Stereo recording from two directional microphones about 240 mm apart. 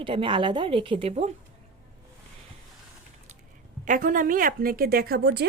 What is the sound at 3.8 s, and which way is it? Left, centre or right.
A woman's voice, right.